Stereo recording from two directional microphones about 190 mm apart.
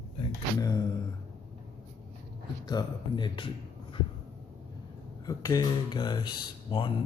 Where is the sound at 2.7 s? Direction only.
20° left (ahead or behind).